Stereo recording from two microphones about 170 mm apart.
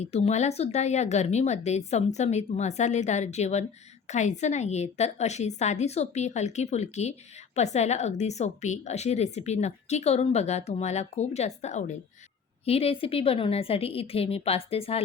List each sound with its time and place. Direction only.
0.0 s speech: 40° left (ahead or behind)